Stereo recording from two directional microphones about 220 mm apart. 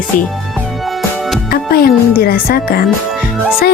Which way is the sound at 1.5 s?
45° left (ahead or behind).